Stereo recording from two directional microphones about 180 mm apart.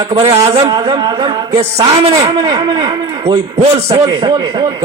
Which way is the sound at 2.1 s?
20° right (ahead or behind).